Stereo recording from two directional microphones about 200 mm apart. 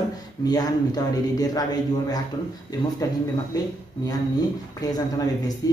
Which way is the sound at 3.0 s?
15° left (ahead or behind).